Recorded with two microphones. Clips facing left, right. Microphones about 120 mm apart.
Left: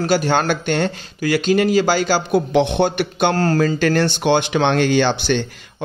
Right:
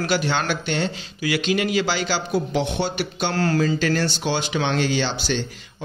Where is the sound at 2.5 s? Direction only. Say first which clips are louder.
Left 7 dB; 55° left (ahead or behind).